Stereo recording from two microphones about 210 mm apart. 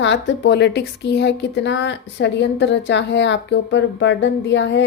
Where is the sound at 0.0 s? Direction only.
60° left (ahead or behind).